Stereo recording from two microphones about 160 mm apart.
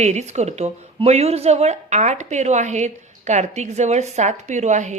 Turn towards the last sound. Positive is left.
turn(degrees=-45)  # may be behind; listen again after turning